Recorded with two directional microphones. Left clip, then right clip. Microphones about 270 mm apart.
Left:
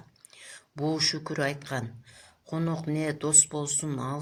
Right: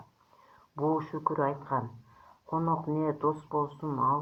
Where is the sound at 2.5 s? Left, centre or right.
Left.